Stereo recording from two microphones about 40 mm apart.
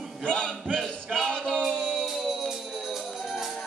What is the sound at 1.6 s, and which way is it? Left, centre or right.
Music, centre.